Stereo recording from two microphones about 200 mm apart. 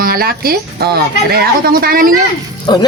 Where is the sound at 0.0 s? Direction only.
50° right (ahead or behind).